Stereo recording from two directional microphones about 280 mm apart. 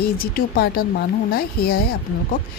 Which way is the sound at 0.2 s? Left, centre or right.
Left.